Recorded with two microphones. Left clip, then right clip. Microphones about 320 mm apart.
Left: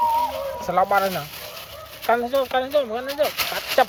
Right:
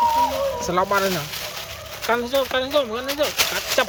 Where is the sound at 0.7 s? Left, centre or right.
Centre.